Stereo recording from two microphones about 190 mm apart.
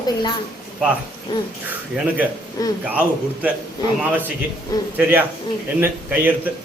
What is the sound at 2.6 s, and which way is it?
Speech, 20° left (ahead or behind).